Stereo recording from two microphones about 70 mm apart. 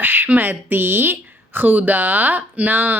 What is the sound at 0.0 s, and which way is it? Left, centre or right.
A woman's voice, right.